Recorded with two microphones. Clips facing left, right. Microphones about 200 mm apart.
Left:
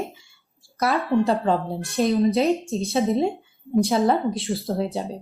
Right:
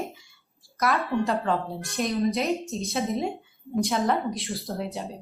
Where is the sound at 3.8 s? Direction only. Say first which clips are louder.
Left 3 dB; 35° left (ahead or behind).